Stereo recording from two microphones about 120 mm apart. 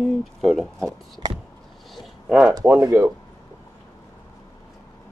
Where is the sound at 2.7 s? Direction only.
25° right (ahead or behind).